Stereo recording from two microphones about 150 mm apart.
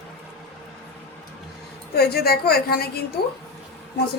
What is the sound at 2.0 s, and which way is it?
A woman's voice, 90° left.